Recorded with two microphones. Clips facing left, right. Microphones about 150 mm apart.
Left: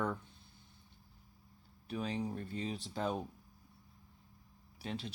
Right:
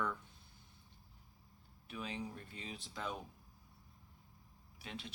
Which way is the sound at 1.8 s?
40° left (ahead or behind).